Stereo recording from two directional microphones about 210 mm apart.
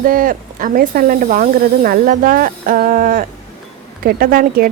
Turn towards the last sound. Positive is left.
turn(degrees=-45)  # may be behind; listen again after turning